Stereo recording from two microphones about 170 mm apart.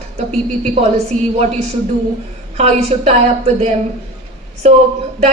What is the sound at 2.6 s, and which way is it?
A woman's voice, 40° right (ahead or behind).